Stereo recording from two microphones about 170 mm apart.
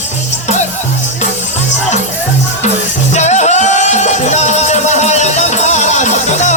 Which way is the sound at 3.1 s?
45° left (ahead or behind).